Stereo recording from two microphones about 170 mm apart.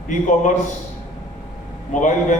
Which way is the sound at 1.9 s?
50° left (ahead or behind).